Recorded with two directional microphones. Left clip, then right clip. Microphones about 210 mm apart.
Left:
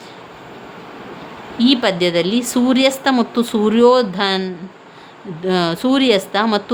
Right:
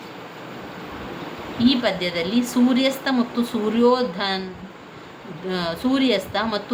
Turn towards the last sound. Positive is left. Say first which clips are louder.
# left 6 dB
turn(degrees=55)  # may be behind; listen again after turning